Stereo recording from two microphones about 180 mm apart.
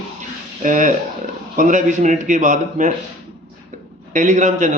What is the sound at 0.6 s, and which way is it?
A man's voice, 45° right (ahead or behind).